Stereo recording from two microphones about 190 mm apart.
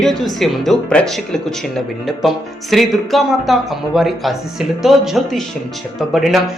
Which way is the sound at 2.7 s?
Centre (ahead or behind).